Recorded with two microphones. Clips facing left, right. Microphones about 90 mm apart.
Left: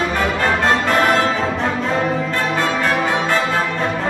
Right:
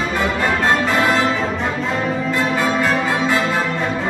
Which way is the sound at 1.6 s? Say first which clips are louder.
Left 2 dB; centre (ahead or behind).